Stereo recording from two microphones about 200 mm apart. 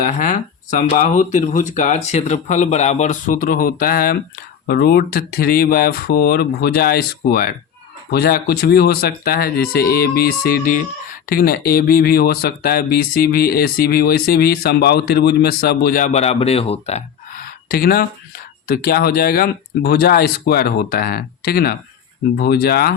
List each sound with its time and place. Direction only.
0.0 s speech: 40° left (ahead or behind)
17.4 s a sound: 45° left (ahead or behind)
18.7 s speech: 50° left (ahead or behind)